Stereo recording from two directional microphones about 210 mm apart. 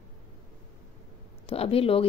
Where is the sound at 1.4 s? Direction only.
25° left (ahead or behind).